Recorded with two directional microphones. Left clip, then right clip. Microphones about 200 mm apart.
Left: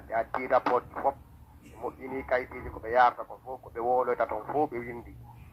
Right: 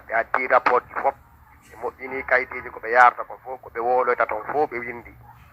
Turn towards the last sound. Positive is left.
turn(degrees=-25)  # may be behind; listen again after turning